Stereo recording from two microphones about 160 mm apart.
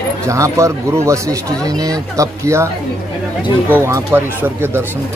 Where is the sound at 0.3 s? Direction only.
20° right (ahead or behind).